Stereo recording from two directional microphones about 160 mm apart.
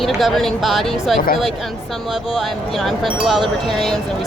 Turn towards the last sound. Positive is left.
turn(degrees=0)  # may be behind; listen again after turning